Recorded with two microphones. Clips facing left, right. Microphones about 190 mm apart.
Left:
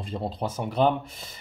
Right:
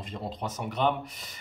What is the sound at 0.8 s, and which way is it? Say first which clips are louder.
Speech: left 5 dB; 35° left (ahead or behind).